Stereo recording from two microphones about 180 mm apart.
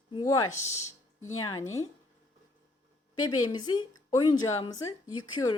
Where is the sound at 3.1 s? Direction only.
25° left (ahead or behind).